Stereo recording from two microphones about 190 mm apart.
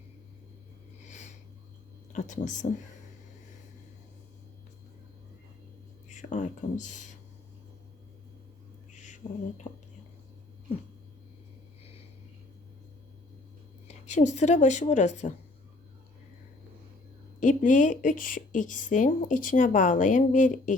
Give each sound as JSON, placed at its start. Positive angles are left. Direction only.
{"t": 1.0, "sound": "a sound", "side_deg": 40}
{"t": 2.1, "sound": "speech", "side_deg": 40}
{"t": 6.1, "sound": "speech", "side_deg": 40}
{"t": 8.9, "sound": "a sound", "side_deg": 40}
{"t": 13.8, "sound": "a woman's voice", "side_deg": 35}
{"t": 17.4, "sound": "speech", "side_deg": 40}